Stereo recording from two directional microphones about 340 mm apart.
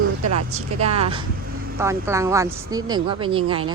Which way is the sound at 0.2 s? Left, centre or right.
Right.